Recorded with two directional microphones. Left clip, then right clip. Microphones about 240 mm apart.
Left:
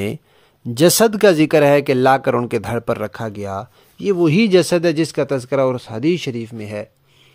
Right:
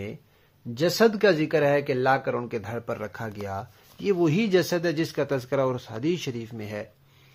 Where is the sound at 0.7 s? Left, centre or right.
Left.